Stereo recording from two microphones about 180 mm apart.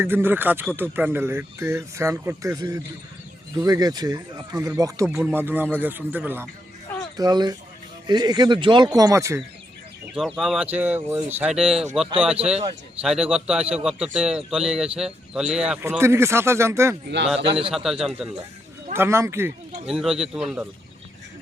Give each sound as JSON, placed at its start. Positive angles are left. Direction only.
{"t": 0.0, "sound": "speech", "side_deg": -10}
{"t": 7.2, "sound": "speech", "side_deg": -20}
{"t": 10.2, "sound": "a man's voice", "side_deg": 0}
{"t": 16.0, "sound": "speech", "side_deg": -15}
{"t": 17.2, "sound": "a man's voice", "side_deg": -35}
{"t": 17.7, "sound": "a man's voice", "side_deg": 0}
{"t": 18.9, "sound": "speech", "side_deg": -15}
{"t": 19.9, "sound": "a man's voice", "side_deg": -5}